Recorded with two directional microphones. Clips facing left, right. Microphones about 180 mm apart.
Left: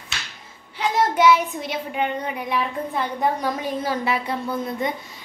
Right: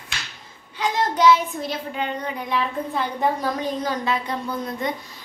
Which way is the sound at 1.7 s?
20° left (ahead or behind).